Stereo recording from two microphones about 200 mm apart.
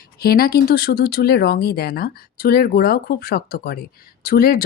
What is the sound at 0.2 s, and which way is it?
A woman's voice, 50° left (ahead or behind).